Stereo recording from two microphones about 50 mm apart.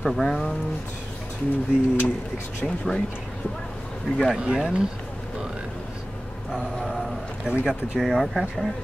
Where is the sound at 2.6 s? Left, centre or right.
Centre.